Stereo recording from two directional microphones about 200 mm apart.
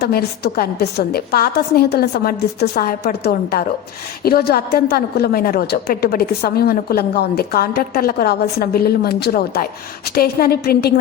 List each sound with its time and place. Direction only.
0.0 s a woman's voice: 55° left (ahead or behind)